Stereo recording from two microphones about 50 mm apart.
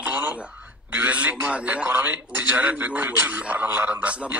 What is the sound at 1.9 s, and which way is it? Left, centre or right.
Speech, right.